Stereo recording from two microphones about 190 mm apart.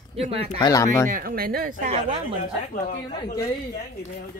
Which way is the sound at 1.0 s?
50° right (ahead or behind).